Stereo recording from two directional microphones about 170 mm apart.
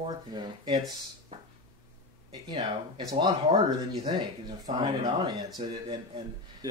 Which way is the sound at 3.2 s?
25° right (ahead or behind).